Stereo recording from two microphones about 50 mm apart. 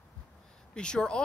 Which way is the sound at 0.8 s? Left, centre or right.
Centre.